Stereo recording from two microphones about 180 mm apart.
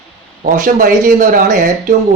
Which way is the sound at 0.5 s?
50° right (ahead or behind).